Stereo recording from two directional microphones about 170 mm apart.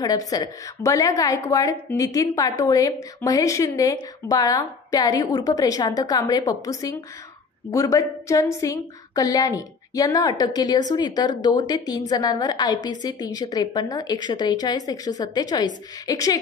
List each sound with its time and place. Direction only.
0.0 s a woman's voice: 20° left (ahead or behind)